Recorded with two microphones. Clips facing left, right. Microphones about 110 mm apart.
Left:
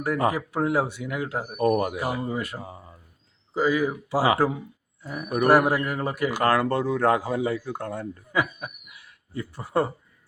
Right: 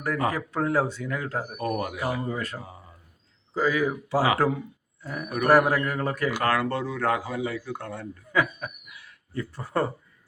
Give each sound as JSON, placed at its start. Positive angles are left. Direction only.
{"t": 0.3, "sound": "speech", "side_deg": 15}
{"t": 1.5, "sound": "a man's voice", "side_deg": 35}
{"t": 2.0, "sound": "speech", "side_deg": 15}
{"t": 6.3, "sound": "a man's voice", "side_deg": 35}
{"t": 8.3, "sound": "chuckle", "side_deg": 10}